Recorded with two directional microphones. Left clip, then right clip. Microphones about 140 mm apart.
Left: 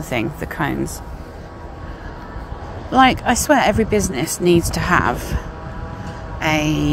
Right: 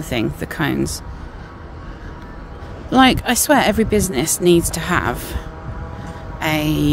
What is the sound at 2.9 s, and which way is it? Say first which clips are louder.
Speech: even; 40° right (ahead or behind).